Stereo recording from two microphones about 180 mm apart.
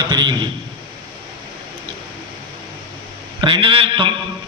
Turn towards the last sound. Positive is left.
turn(degrees=-30)  # may be behind; listen again after turning